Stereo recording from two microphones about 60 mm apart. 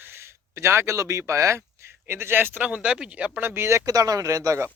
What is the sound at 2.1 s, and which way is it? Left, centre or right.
Speech, right.